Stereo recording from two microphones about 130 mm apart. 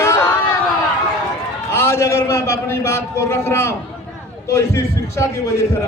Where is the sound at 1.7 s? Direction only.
20° left (ahead or behind).